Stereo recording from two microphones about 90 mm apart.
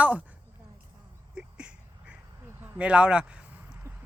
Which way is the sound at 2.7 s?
10° right (ahead or behind).